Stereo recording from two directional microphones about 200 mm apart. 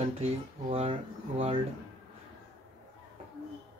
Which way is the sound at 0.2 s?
30° right (ahead or behind).